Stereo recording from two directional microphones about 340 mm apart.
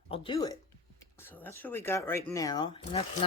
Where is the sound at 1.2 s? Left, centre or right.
Centre.